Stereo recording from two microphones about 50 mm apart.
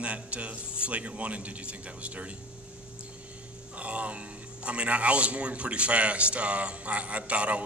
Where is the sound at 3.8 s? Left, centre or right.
Right.